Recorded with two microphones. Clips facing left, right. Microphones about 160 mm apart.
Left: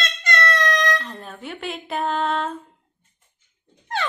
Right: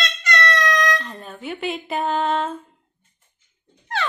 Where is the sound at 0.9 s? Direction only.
Centre (ahead or behind).